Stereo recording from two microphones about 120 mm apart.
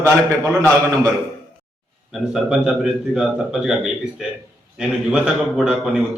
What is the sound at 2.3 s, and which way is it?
A man's voice, centre (ahead or behind).